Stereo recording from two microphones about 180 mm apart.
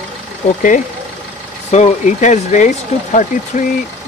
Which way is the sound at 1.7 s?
40° left (ahead or behind).